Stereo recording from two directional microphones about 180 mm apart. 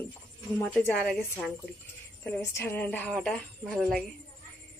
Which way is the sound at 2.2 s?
10° left (ahead or behind).